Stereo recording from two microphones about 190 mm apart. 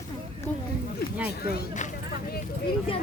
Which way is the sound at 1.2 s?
55° left (ahead or behind).